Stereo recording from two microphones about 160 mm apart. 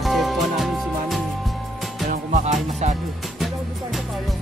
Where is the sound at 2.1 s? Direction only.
45° right (ahead or behind).